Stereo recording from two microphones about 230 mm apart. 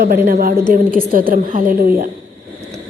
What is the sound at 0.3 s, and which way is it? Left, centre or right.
A woman's voice, right.